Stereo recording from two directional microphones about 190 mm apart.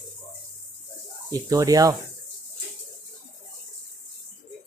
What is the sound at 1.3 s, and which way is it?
Speech, 20° right (ahead or behind).